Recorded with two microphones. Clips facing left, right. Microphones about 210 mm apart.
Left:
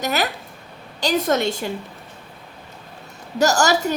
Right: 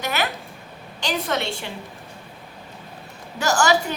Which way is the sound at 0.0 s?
40° left (ahead or behind).